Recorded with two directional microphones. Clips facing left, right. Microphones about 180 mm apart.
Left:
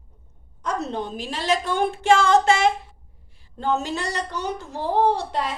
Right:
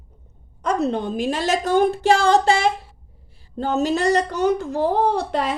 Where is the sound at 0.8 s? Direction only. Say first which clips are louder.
Right 8 dB; 55° right (ahead or behind).